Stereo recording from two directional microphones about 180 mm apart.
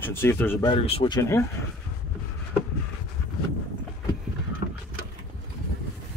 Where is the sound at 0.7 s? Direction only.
30° left (ahead or behind).